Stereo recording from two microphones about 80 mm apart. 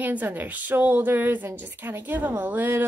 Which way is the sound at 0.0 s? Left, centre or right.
Right.